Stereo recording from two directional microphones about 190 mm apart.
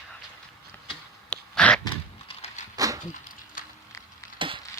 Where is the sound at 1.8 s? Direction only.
30° left (ahead or behind).